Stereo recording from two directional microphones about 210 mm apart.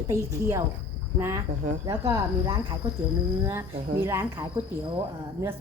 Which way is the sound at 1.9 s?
15° right (ahead or behind).